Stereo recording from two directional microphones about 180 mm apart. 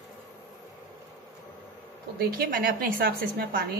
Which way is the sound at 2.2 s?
55° right (ahead or behind).